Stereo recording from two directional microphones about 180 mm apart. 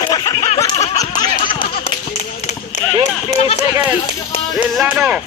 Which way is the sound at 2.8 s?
40° left (ahead or behind).